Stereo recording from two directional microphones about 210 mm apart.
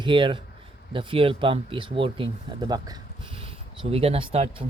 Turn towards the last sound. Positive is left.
turn(degrees=-25)  # may be behind; listen again after turning